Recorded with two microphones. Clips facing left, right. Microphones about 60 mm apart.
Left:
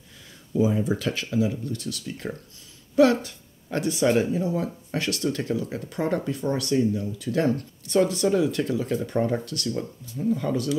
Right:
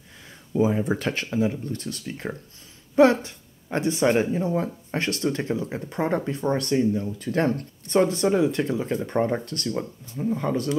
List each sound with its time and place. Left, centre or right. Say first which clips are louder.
0.5 s speech: right 1 dB; right